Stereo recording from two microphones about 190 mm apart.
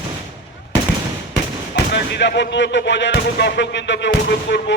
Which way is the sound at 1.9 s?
65° left (ahead or behind).